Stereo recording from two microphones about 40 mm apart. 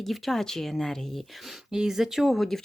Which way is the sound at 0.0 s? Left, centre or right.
Centre.